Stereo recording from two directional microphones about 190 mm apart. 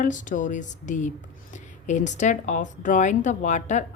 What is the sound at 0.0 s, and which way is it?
Speech, 45° left (ahead or behind).